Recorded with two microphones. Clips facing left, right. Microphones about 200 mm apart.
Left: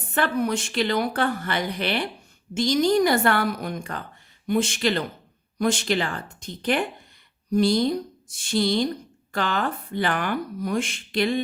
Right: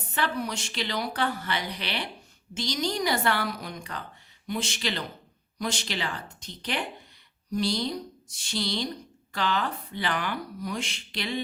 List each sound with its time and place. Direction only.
0.1 s speech: 55° left (ahead or behind)